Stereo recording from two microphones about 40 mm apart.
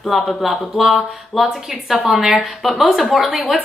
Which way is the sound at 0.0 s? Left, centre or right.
Centre.